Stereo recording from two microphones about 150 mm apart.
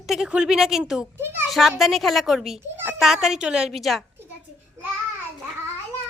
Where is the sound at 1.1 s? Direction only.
15° right (ahead or behind).